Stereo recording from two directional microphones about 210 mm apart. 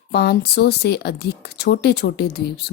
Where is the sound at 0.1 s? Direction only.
50° left (ahead or behind).